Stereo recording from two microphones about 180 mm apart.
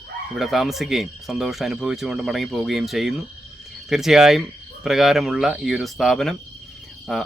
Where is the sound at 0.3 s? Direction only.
Centre (ahead or behind).